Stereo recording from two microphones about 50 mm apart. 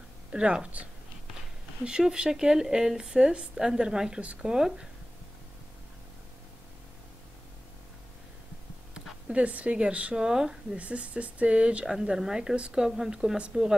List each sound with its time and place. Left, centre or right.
0.3 s speech: centre
1.9 s speech: centre
9.3 s speech: right
10.2 s speech: centre
10.8 s speech: right
12.2 s speech: centre